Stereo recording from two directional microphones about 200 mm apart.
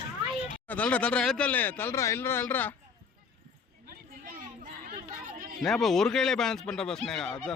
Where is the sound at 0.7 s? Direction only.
5° left (ahead or behind).